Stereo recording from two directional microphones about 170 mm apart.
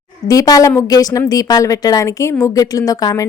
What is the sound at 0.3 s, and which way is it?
A woman's voice, 20° left (ahead or behind).